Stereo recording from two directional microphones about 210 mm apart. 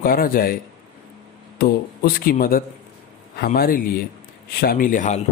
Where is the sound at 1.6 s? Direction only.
45° left (ahead or behind).